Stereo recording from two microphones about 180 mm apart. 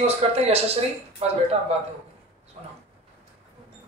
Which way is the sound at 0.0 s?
35° right (ahead or behind).